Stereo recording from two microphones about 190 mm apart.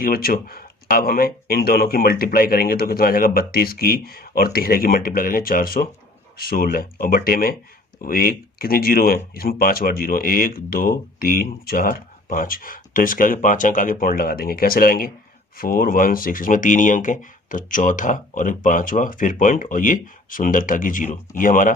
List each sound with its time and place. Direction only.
0.0 s speech: 50° left (ahead or behind)